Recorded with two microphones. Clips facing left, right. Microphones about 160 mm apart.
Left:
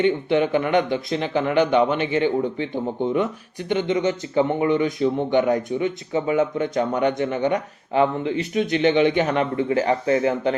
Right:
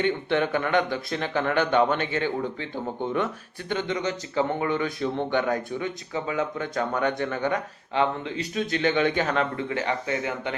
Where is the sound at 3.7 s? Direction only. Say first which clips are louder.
Left 6 dB; 20° left (ahead or behind).